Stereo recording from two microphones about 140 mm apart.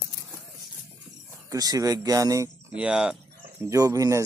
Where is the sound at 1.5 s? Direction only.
25° right (ahead or behind).